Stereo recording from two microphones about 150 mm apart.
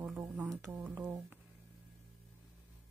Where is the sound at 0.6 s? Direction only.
10° right (ahead or behind).